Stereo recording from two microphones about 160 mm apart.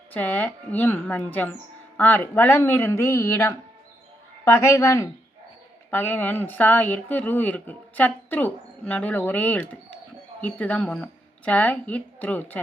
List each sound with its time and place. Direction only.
0.1 s speech: 10° left (ahead or behind)